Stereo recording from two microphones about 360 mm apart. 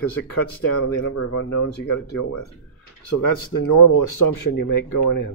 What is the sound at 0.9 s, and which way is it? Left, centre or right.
Speech, left.